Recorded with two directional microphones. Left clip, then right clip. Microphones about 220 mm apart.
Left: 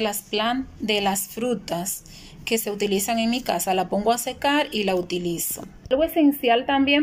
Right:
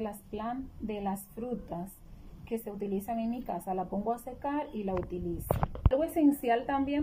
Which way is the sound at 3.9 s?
25° left (ahead or behind).